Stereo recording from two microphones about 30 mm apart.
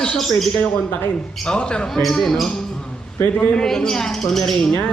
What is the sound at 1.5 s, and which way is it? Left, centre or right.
Speech, left.